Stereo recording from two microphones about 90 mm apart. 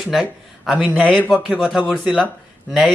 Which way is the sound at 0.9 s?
10° left (ahead or behind).